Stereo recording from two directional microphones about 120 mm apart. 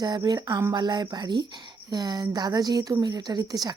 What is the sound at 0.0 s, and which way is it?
Speech, 35° right (ahead or behind).